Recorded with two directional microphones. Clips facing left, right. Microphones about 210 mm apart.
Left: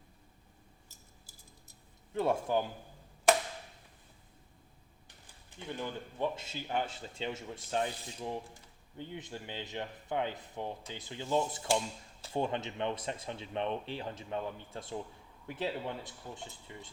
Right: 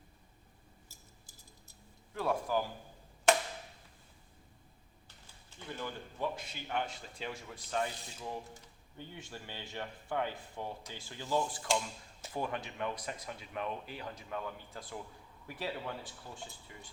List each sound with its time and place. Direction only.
0.9 s a sound: 10° right (ahead or behind)
2.1 s speech: 25° left (ahead or behind)
5.0 s speech: 15° left (ahead or behind)